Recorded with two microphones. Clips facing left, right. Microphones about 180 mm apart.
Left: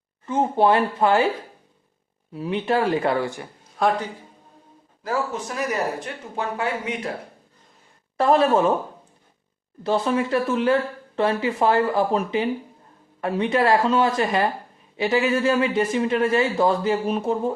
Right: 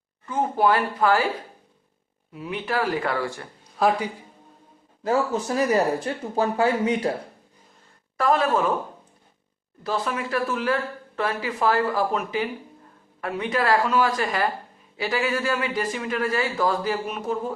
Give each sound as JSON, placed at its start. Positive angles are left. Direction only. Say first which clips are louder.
{"t": 0.3, "sound": "speech", "louder": "left 3 dB", "side_deg": 25}
{"t": 2.3, "sound": "a man's voice", "louder": "left 5 dB", "side_deg": 30}
{"t": 3.8, "sound": "a man's voice", "louder": "even", "side_deg": -5}
{"t": 5.0, "sound": "speech", "louder": "right 3 dB", "side_deg": -30}
{"t": 8.2, "sound": "a man's voice", "louder": "left 4 dB", "side_deg": 30}
{"t": 9.8, "sound": "a man's voice", "louder": "left 6 dB", "side_deg": 25}